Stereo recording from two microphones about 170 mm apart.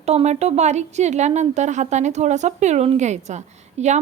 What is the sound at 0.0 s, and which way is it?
A woman's voice, 40° right (ahead or behind).